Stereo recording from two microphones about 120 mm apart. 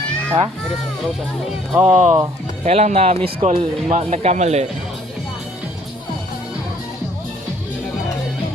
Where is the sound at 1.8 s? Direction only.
70° right (ahead or behind).